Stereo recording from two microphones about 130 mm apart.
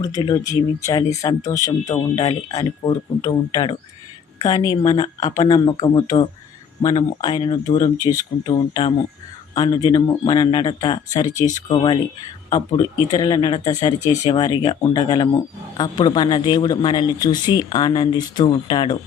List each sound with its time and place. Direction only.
0.0 s speech: 30° left (ahead or behind)
11.7 s speech: 40° left (ahead or behind)